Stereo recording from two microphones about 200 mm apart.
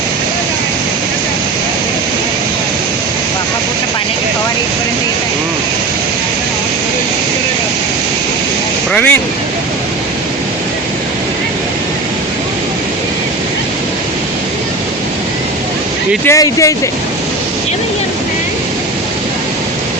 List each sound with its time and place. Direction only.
8.9 s speech: 5° left (ahead or behind)
16.2 s speech: 15° left (ahead or behind)